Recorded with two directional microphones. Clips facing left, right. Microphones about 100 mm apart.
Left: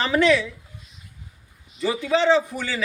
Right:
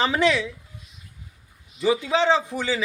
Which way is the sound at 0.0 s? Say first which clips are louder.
Left 2 dB; 20° right (ahead or behind).